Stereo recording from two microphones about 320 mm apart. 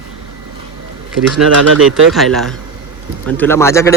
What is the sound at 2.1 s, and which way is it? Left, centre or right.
Speech, centre.